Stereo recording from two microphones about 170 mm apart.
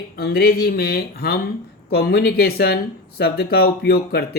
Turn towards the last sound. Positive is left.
turn(degrees=65)  # may be behind; listen again after turning